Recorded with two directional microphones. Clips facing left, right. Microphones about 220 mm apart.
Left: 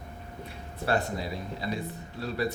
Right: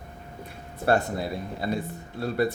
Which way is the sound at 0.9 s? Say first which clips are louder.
Right 5 dB; 55° right (ahead or behind).